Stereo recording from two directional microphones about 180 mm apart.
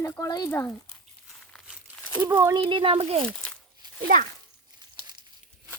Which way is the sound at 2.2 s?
15° right (ahead or behind).